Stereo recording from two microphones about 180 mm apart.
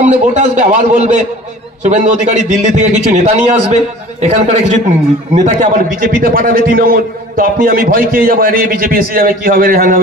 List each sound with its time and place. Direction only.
0.0 s a man's voice: 40° right (ahead or behind)